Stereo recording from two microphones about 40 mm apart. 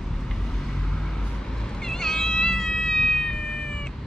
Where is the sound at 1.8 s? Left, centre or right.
Centre.